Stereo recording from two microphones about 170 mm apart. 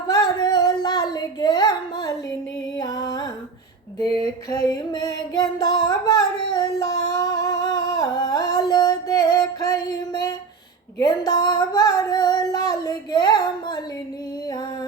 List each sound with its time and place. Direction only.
0.1 s female singing: 20° left (ahead or behind)
2.7 s music: 20° left (ahead or behind)
4.0 s a sound: 35° right (ahead or behind)
4.7 s singing: 25° left (ahead or behind)
10.9 s female singing: 20° left (ahead or behind)